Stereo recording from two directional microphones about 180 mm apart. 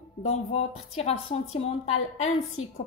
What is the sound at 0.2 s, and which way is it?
Speech, 35° left (ahead or behind).